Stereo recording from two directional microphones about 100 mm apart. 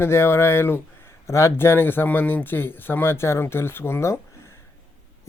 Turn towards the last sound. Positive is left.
turn(degrees=25)  # may be behind; listen again after turning